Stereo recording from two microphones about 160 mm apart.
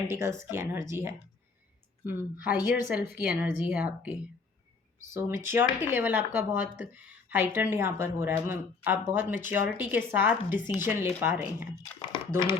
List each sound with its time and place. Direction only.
0.1 s speech: 15° right (ahead or behind)
11.8 s speech: 25° left (ahead or behind)